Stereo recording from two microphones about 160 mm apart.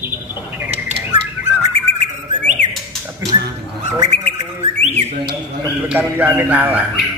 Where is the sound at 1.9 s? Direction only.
45° right (ahead or behind).